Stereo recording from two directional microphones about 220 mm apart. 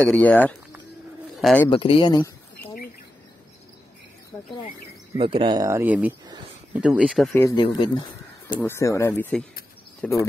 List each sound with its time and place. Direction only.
0.0 s speech: 5° left (ahead or behind)
1.7 s speech: 25° left (ahead or behind)
5.1 s speech: 25° right (ahead or behind); by 7.2 s 5° right (ahead or behind)
7.3 s speech: 15° left (ahead or behind)
8.5 s speech: 10° left (ahead or behind)